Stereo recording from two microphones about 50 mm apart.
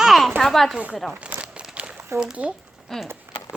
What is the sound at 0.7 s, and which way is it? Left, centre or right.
Speech, right.